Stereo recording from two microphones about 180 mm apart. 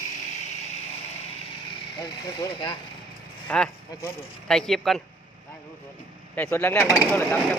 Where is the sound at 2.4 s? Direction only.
20° left (ahead or behind).